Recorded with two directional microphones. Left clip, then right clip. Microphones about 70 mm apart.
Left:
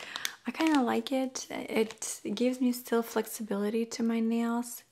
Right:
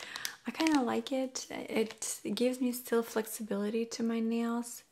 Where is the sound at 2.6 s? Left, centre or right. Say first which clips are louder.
Left 2 dB; left.